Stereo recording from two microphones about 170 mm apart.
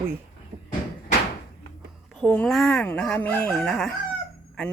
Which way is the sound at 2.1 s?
5° left (ahead or behind).